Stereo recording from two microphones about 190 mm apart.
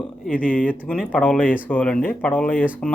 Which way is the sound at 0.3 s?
5° left (ahead or behind).